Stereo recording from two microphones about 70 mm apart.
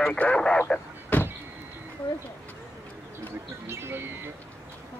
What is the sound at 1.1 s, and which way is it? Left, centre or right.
Vehicle, left.